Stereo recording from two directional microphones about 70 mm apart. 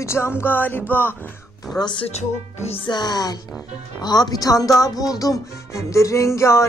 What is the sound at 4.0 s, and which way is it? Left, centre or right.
Speech, left.